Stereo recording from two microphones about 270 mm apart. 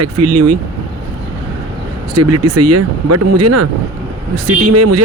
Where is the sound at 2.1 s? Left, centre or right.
Right.